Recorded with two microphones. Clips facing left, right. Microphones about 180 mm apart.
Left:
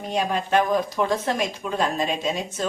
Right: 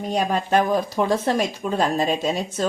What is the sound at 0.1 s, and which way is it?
Speech, 40° right (ahead or behind).